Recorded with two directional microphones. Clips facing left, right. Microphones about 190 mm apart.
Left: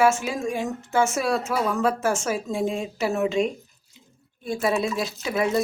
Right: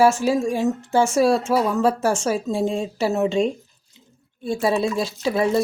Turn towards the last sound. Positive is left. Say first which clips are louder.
# right 4 dB
turn(degrees=-30)  # may be behind; listen again after turning